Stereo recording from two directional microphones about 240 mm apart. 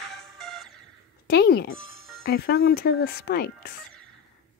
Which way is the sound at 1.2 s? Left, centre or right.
Left.